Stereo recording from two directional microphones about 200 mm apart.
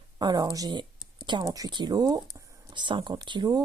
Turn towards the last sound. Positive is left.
turn(degrees=-20)  # may be behind; listen again after turning